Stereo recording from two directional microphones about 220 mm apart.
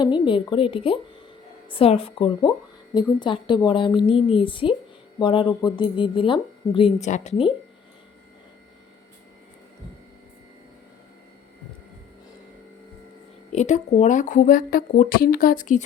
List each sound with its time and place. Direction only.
0.0 s speech: 20° left (ahead or behind)
13.5 s a woman's voice: 30° left (ahead or behind)